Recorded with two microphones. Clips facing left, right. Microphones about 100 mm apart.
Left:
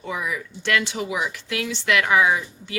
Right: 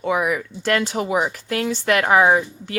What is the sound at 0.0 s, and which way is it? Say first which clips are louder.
Speech: right 8 dB; 65° right (ahead or behind).